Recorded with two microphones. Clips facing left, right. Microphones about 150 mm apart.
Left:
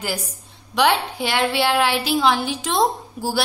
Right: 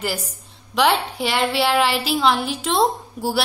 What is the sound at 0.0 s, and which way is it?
A woman's voice, centre (ahead or behind).